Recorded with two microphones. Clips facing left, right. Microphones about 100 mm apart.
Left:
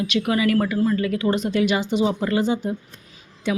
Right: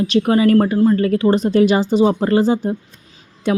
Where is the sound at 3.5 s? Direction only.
45° right (ahead or behind).